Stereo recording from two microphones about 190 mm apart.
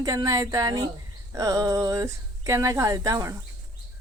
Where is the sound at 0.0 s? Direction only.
20° right (ahead or behind).